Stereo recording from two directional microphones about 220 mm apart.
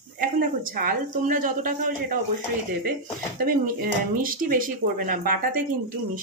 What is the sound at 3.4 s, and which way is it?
Speech, 40° right (ahead or behind).